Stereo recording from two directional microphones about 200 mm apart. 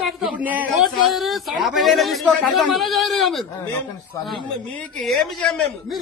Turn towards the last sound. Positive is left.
turn(degrees=5)  # may be behind; listen again after turning